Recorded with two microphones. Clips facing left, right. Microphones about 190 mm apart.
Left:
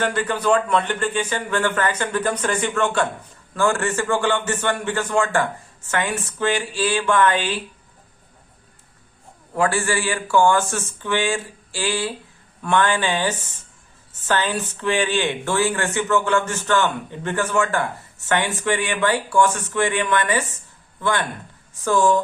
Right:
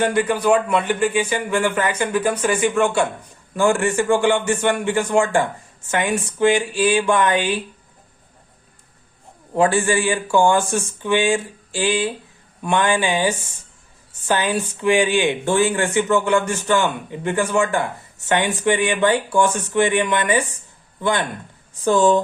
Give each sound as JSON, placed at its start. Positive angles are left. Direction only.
{"t": 0.0, "sound": "speech", "side_deg": -15}
{"t": 9.6, "sound": "speech", "side_deg": -20}